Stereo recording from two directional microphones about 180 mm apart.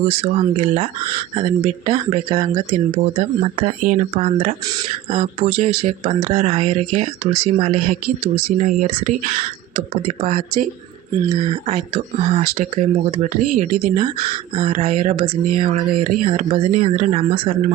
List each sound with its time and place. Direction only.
0.2 s speech: 40° right (ahead or behind)
1.0 s speech: 30° right (ahead or behind)
2.3 s speech: 20° right (ahead or behind)
2.6 s speech: 40° right (ahead or behind)
8.0 s speech: 45° right (ahead or behind); by 17.7 s 30° right (ahead or behind)